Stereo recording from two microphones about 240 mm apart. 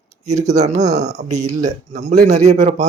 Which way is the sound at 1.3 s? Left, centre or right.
Centre.